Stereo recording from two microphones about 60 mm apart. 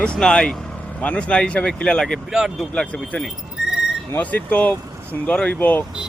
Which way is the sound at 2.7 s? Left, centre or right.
Left.